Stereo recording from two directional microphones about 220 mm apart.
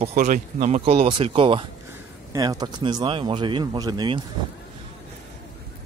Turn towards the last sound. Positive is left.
turn(degrees=-20)  # may be behind; listen again after turning